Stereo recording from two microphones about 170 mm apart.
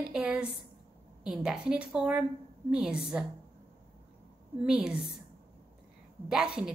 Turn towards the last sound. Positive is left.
turn(degrees=-5)  # may be behind; listen again after turning